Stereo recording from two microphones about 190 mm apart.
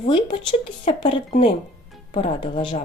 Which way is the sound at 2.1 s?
30° left (ahead or behind).